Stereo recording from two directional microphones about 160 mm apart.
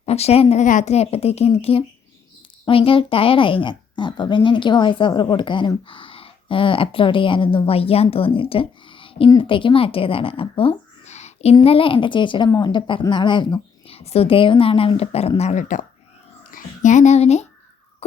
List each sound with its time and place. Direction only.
0.0 s a woman's voice: 40° left (ahead or behind)